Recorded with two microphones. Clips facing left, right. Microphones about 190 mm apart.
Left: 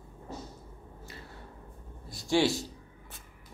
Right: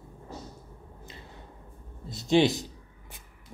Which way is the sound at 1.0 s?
20° right (ahead or behind).